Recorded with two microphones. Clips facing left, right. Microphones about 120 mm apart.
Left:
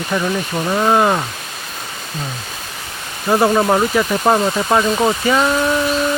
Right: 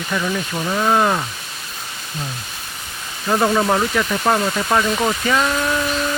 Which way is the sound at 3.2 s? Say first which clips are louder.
Left 3 dB; 20° left (ahead or behind).